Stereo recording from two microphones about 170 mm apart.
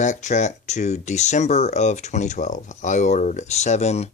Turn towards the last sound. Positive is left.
turn(degrees=40)  # may be behind; listen again after turning